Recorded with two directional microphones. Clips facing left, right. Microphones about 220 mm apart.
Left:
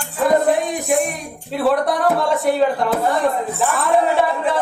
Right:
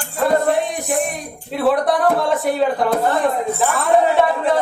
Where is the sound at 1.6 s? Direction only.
Centre (ahead or behind).